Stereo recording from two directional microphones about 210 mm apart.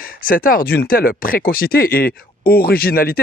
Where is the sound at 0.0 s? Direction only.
40° left (ahead or behind).